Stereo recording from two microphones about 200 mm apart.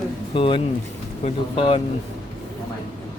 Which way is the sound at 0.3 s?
25° left (ahead or behind).